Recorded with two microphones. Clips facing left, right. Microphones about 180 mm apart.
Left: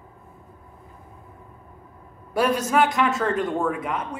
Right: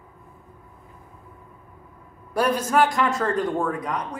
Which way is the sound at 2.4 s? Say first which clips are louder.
Left 1 dB; 25° left (ahead or behind).